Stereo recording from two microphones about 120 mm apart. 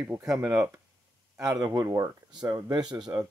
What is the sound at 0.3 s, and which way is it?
Speech, 25° right (ahead or behind).